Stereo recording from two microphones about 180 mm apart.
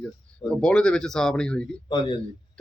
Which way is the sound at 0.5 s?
5° left (ahead or behind).